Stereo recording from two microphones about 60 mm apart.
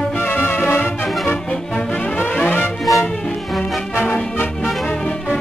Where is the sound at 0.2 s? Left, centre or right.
Left.